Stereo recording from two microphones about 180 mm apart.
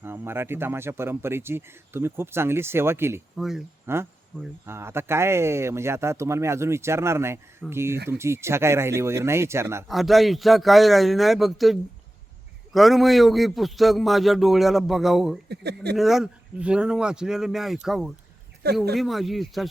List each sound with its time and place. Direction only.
0.0 s speech: 15° right (ahead or behind)
3.3 s a man's voice: centre (ahead or behind)
3.9 s speech: 15° right (ahead or behind)
9.9 s a man's voice: centre (ahead or behind)
15.4 s speech: 65° right (ahead or behind)
16.0 s a man's voice: centre (ahead or behind)